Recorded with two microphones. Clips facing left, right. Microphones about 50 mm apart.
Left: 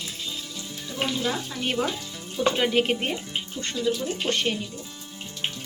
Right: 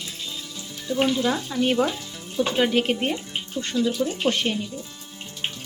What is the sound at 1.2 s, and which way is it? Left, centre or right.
Speech, centre.